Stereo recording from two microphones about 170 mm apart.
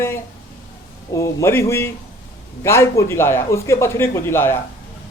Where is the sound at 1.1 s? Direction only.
15° left (ahead or behind).